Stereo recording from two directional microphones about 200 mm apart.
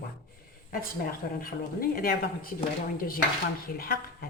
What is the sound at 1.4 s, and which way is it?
A woman's voice, 45° left (ahead or behind).